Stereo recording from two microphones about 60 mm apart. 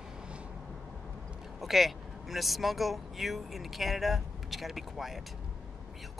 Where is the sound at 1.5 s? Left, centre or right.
Centre.